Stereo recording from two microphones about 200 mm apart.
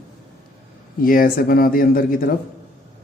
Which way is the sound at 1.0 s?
45° left (ahead or behind).